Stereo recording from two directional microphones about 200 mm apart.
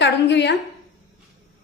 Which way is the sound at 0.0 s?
60° left (ahead or behind).